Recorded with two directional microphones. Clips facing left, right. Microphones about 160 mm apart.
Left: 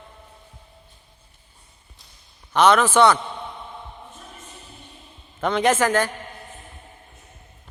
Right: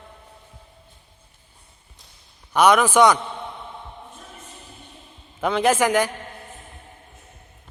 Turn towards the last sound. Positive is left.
turn(degrees=-15)  # may be behind; listen again after turning